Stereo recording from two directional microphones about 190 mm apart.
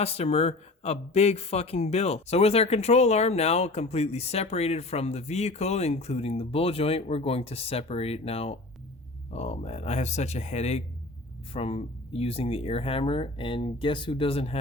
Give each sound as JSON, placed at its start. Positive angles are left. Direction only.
{"t": 0.0, "sound": "speech", "side_deg": 35}